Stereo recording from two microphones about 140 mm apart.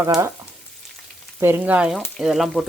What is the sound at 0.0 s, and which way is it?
Frying, 25° right (ahead or behind).